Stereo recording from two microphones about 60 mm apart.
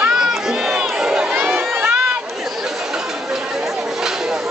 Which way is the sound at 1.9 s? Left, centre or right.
Centre.